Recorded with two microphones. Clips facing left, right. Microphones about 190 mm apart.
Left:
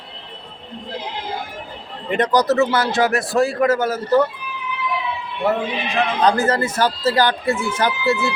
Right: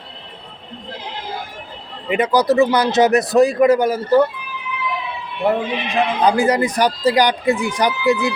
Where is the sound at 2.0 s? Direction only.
10° right (ahead or behind).